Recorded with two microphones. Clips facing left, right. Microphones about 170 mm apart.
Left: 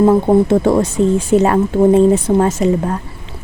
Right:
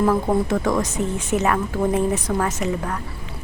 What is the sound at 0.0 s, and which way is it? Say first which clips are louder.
Speech: left 8 dB; 25° left (ahead or behind).